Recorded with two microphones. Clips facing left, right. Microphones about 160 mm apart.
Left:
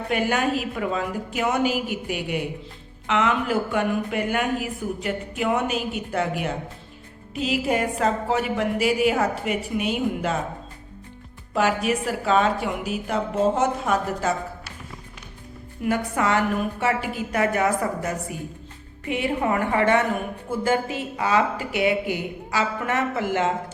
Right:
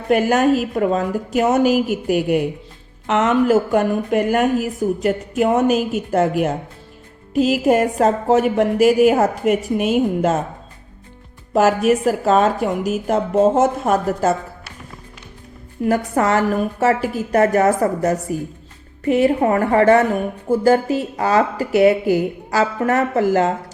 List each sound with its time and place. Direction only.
0.1 s a woman's voice: 45° right (ahead or behind)
11.5 s a woman's voice: 45° right (ahead or behind)
15.8 s speech: 40° right (ahead or behind)